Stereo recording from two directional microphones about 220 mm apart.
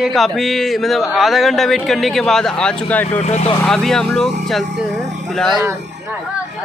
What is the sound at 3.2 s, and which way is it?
Speech, 30° left (ahead or behind).